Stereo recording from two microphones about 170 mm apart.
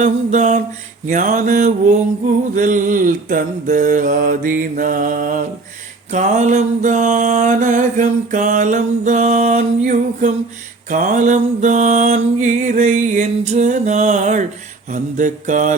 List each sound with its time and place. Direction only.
0.0 s mantra: 45° right (ahead or behind)